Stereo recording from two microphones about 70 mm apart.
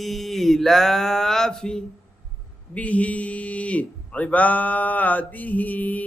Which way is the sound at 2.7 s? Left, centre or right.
Left.